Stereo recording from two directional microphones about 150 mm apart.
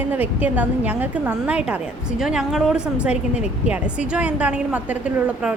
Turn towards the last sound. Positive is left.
turn(degrees=-10)  # may be behind; listen again after turning